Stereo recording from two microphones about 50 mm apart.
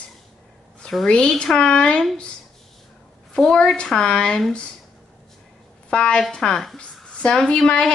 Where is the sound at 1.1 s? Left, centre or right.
Centre.